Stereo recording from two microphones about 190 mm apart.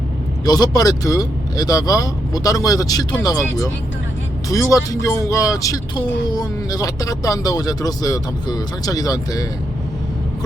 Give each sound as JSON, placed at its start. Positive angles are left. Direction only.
{"t": 0.4, "sound": "speech", "side_deg": 20}